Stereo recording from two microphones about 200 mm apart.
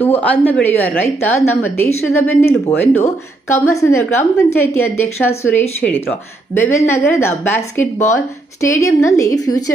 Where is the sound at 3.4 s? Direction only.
15° left (ahead or behind).